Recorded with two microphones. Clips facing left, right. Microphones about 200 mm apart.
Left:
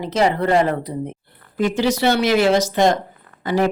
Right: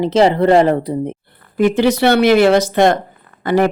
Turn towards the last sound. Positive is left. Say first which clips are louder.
# right 5 dB
turn(degrees=-60)  # may be behind; listen again after turning